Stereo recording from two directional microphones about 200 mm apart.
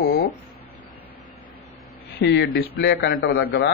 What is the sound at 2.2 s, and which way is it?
Speech, 60° left (ahead or behind).